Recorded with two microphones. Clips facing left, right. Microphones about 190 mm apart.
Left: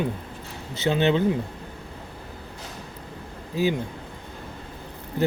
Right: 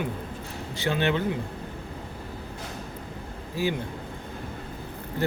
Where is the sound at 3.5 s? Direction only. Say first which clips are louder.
Left 4 dB; 20° left (ahead or behind).